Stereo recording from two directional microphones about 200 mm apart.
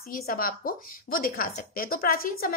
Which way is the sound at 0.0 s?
50° left (ahead or behind).